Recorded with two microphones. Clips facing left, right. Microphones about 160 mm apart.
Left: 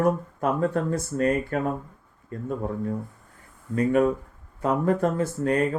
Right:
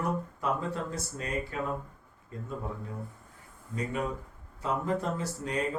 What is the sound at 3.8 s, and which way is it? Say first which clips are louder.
Speech: left 12 dB; 60° left (ahead or behind).